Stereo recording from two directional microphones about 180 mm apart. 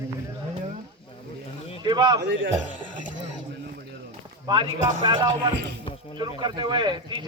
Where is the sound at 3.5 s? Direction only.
70° right (ahead or behind).